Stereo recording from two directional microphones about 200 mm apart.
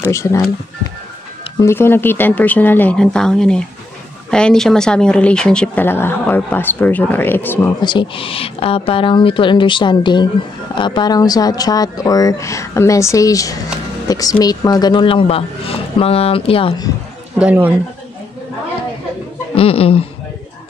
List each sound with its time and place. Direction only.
0.1 s speech: 15° left (ahead or behind)
1.6 s speech: 10° left (ahead or behind)
7.8 s speech: 25° left (ahead or behind)
17.4 s speech: 5° right (ahead or behind)
19.5 s speech: 30° left (ahead or behind)